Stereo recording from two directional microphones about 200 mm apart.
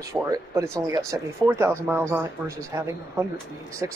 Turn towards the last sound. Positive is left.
turn(degrees=-15)  # may be behind; listen again after turning